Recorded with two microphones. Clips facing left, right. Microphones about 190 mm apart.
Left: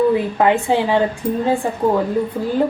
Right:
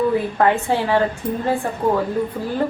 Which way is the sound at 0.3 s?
15° left (ahead or behind).